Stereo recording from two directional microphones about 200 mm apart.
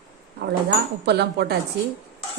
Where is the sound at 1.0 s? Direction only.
55° right (ahead or behind).